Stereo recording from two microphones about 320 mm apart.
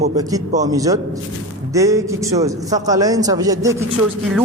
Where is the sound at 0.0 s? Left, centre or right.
Centre.